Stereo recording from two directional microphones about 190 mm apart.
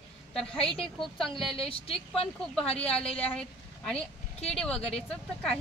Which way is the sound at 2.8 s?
5° left (ahead or behind).